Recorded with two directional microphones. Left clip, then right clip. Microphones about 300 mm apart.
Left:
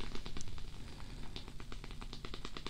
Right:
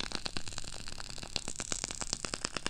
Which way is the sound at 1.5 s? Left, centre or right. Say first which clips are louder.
Right 13 dB; right.